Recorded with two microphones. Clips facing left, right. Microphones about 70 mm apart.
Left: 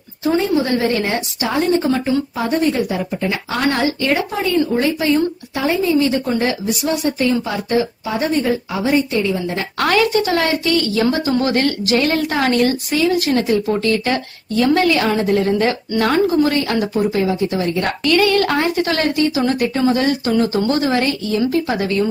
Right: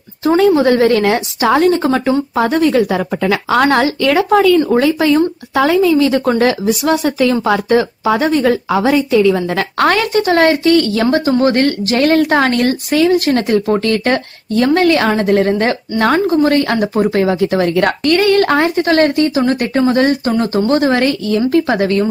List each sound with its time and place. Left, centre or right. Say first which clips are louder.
0.7 s speech: right 7 dB; right
3.8 s speech: right 5 dB; right
4.6 s speech: right 5 dB; right
9.8 s speech: right 2 dB; right
16.0 s speech: right 3 dB; right
20.3 s speech: right 3 dB; right